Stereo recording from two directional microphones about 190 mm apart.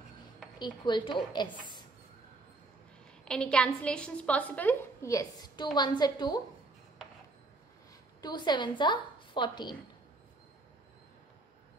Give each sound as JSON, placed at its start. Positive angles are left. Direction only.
{"t": 0.6, "sound": "a woman's voice", "side_deg": 25}
{"t": 3.3, "sound": "a woman's voice", "side_deg": 5}
{"t": 8.2, "sound": "a woman's voice", "side_deg": 20}